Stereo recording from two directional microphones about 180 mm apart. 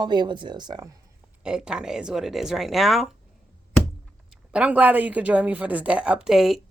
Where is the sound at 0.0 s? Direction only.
25° right (ahead or behind).